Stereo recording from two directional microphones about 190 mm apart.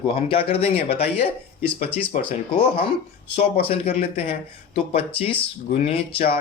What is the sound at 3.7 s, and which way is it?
Speech, 30° left (ahead or behind).